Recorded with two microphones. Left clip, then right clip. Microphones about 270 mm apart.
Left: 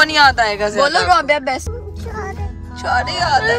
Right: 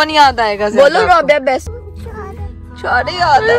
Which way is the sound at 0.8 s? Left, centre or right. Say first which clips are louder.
Right 2 dB; right.